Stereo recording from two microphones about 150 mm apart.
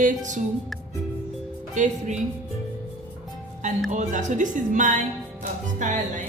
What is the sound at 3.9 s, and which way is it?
Speech, 55° right (ahead or behind).